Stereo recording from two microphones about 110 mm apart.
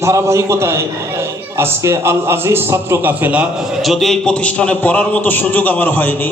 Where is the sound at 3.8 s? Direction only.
Centre (ahead or behind).